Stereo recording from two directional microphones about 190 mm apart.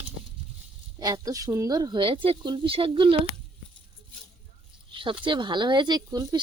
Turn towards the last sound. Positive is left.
turn(degrees=-20)  # may be behind; listen again after turning